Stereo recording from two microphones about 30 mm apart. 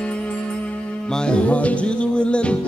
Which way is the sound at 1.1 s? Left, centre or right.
Left.